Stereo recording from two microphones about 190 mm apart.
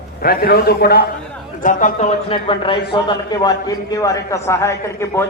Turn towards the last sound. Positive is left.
turn(degrees=15)  # may be behind; listen again after turning